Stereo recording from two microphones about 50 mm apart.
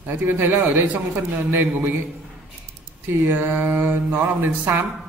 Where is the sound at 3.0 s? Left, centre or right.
Right.